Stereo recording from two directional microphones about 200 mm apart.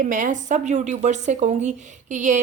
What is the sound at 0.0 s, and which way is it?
Speech, 40° right (ahead or behind).